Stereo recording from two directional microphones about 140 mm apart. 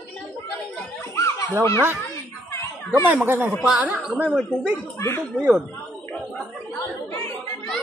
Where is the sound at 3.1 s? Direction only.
15° right (ahead or behind).